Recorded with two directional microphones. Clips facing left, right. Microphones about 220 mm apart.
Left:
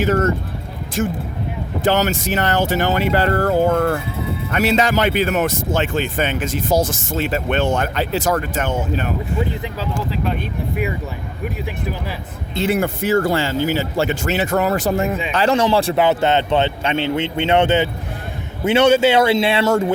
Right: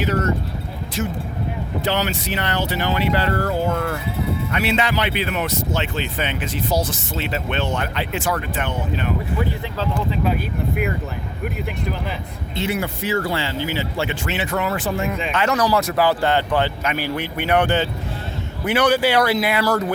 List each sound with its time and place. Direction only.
0.0 s speech: 50° left (ahead or behind)
11.4 s speech: 5° left (ahead or behind)
12.6 s speech: 50° left (ahead or behind); by 19.9 s 25° left (ahead or behind)